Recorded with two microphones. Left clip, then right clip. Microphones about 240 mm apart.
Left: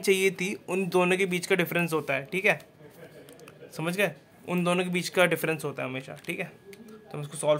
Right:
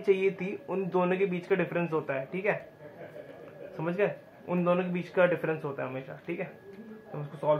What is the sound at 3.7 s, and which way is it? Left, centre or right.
Speech, left.